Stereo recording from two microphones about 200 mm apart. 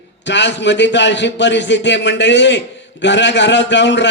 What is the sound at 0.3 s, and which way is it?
A man's voice, 60° left (ahead or behind).